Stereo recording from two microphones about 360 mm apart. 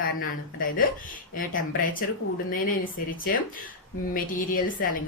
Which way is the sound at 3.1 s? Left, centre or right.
Left.